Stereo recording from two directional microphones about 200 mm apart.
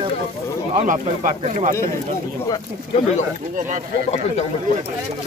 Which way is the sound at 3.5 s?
40° right (ahead or behind).